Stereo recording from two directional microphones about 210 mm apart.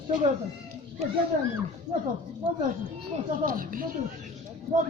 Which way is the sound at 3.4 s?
40° right (ahead or behind).